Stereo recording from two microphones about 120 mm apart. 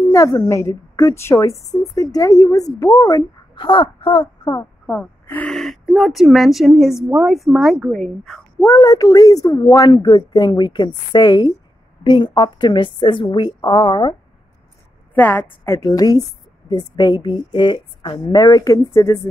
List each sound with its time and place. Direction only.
0.0 s a woman's voice: 25° left (ahead or behind)
3.5 s speech: 45° left (ahead or behind)
4.8 s gasp: 15° left (ahead or behind)
5.5 s speech: 5° left (ahead or behind)
8.6 s a woman's voice: 25° left (ahead or behind)
15.1 s a woman's voice: 15° left (ahead or behind)